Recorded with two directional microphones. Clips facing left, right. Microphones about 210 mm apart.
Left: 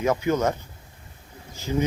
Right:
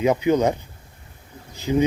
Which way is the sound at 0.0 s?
15° right (ahead or behind).